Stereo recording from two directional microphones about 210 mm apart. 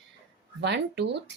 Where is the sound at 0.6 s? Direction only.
55° right (ahead or behind).